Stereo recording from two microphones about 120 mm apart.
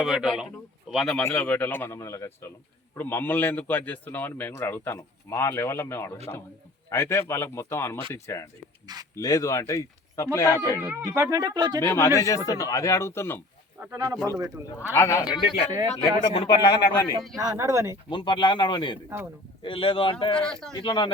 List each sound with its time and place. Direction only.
0.0 s a man's voice: 5° right (ahead or behind)
1.2 s a man's voice: 15° left (ahead or behind)
10.8 s speech: 20° right (ahead or behind)
11.8 s speech: 20° left (ahead or behind)
13.9 s speech: 30° right (ahead or behind)
14.8 s speech: 20° left (ahead or behind)
16.3 s speech: 50° left (ahead or behind)
16.6 s speech: 35° left (ahead or behind)
17.3 s speech: 30° right (ahead or behind)
18.1 s speech: 45° left (ahead or behind)
19.0 s speech: 20° right (ahead or behind)
19.6 s speech: 45° left (ahead or behind)
20.3 s a man's voice: 5° left (ahead or behind)
20.7 s speech: 40° left (ahead or behind)